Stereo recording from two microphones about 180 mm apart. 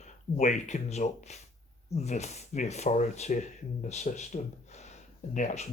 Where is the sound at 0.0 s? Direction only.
40° left (ahead or behind).